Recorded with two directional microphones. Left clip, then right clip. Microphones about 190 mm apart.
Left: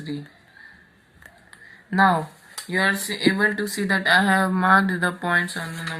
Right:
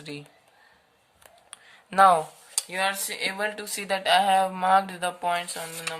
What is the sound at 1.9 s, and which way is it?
Speech, 35° right (ahead or behind).